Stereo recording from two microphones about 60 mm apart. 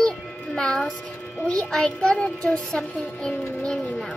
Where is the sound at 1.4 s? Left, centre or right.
Centre.